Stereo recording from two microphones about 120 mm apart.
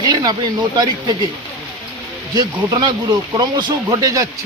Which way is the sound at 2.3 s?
35° right (ahead or behind).